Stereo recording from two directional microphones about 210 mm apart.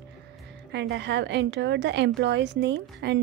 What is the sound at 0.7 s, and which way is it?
A woman's voice, 55° right (ahead or behind).